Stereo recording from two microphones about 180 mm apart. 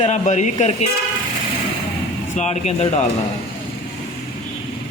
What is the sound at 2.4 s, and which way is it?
Speech, 35° left (ahead or behind).